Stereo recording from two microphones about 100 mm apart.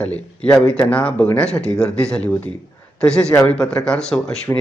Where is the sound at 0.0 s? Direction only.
10° left (ahead or behind).